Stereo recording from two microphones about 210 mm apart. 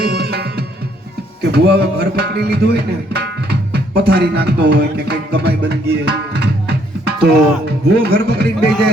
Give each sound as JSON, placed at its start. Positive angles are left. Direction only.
{"t": 0.1, "sound": "music", "side_deg": -50}